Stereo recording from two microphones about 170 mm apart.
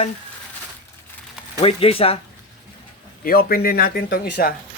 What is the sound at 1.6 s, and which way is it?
Speech, 35° left (ahead or behind).